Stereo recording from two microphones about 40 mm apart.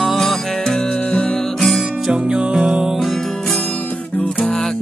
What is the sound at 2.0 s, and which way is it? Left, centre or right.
Music, right.